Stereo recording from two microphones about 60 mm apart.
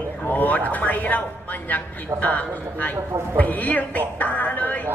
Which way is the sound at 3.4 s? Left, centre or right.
Left.